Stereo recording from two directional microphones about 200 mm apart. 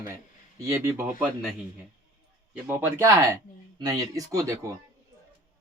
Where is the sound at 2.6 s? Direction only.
10° right (ahead or behind).